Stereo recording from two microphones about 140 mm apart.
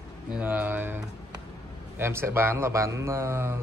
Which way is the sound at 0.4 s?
10° right (ahead or behind).